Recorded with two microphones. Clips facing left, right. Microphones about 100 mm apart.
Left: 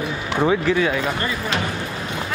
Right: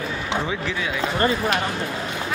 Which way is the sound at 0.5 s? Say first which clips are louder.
Left 8 dB; 50° left (ahead or behind).